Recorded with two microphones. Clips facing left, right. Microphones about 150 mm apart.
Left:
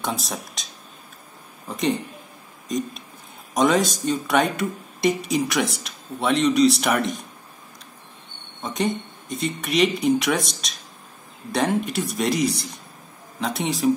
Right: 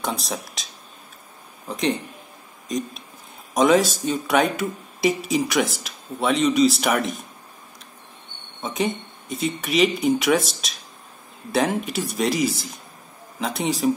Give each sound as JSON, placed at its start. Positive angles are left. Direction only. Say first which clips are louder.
{"t": 0.0, "sound": "speech", "louder": "right 1 dB", "side_deg": 0}
{"t": 1.7, "sound": "speech", "louder": "even", "side_deg": 0}
{"t": 8.6, "sound": "speech", "louder": "even", "side_deg": 0}